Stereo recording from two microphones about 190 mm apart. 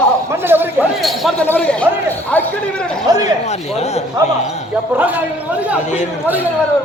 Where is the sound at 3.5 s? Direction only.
35° left (ahead or behind).